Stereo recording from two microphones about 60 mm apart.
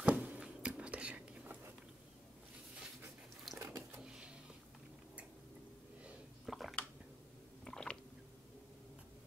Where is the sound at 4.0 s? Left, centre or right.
Centre.